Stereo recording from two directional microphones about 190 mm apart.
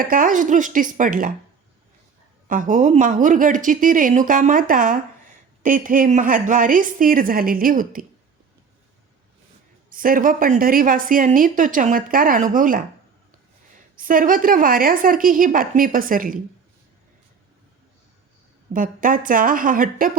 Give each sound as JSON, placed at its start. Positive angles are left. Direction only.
{"t": 0.0, "sound": "a woman's voice", "side_deg": -45}
{"t": 2.5, "sound": "a woman's voice", "side_deg": -45}
{"t": 9.9, "sound": "a woman's voice", "side_deg": -45}
{"t": 18.7, "sound": "a woman's voice", "side_deg": -45}